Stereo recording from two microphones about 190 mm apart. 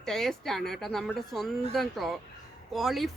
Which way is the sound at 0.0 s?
Centre (ahead or behind).